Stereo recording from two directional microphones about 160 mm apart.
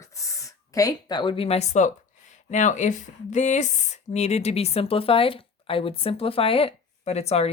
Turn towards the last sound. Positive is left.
turn(degrees=40)  # may be behind; listen again after turning